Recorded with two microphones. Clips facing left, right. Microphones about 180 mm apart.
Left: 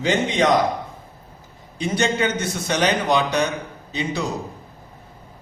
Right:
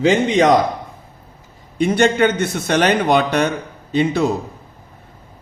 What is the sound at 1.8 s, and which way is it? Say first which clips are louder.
A man's voice: right 7 dB; 60° right (ahead or behind).